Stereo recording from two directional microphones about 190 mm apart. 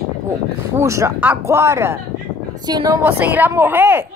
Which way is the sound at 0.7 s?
15° right (ahead or behind).